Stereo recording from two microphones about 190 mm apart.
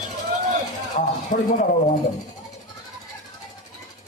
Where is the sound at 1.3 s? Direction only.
45° left (ahead or behind).